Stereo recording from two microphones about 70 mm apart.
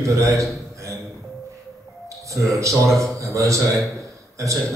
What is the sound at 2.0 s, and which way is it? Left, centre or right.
Music, right.